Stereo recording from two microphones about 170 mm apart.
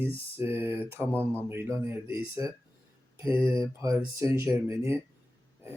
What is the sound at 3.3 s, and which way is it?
Speech, 30° left (ahead or behind).